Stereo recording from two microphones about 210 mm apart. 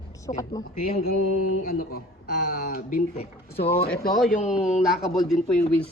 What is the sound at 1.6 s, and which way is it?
Speech, 45° left (ahead or behind).